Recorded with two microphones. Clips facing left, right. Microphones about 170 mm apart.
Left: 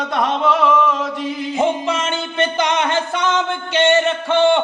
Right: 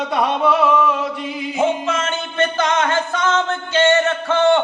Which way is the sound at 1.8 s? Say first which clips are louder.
Left 1 dB; 15° left (ahead or behind).